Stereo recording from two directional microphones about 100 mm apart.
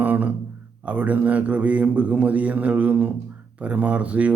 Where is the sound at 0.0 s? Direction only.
15° right (ahead or behind).